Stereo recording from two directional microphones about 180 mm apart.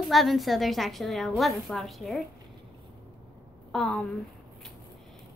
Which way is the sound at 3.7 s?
5° left (ahead or behind).